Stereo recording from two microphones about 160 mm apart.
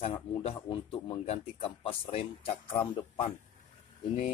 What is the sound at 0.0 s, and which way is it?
A man's voice, 35° left (ahead or behind).